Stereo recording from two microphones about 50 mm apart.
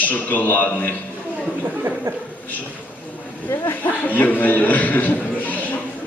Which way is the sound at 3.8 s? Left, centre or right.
Left.